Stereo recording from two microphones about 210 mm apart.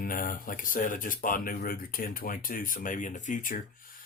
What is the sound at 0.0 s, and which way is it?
Speech, 40° left (ahead or behind).